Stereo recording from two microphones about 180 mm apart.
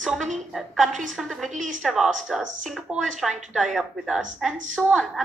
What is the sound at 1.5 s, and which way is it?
Speech, 45° right (ahead or behind).